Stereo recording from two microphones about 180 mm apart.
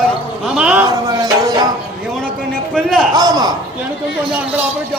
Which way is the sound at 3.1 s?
20° right (ahead or behind).